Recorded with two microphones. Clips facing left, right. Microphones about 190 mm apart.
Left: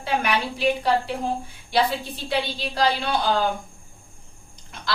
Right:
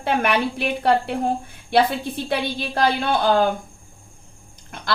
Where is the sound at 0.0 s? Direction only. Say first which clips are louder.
Right 4 dB; 55° right (ahead or behind).